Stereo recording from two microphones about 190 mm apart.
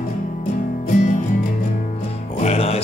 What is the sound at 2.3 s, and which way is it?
Music, 35° left (ahead or behind).